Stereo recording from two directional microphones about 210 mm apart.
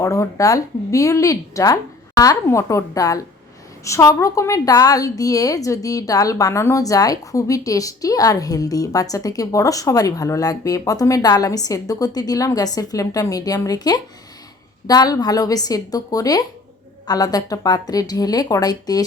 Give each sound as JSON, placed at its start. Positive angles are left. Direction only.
{"t": 0.0, "sound": "a woman's voice", "side_deg": 15}